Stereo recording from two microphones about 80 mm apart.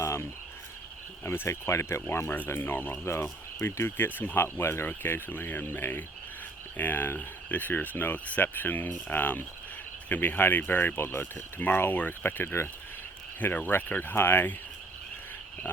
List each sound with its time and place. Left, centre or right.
0.0 s cricket: left
1.2 s speech: left